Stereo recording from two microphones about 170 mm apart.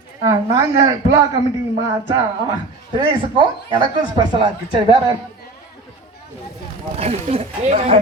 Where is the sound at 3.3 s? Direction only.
30° right (ahead or behind).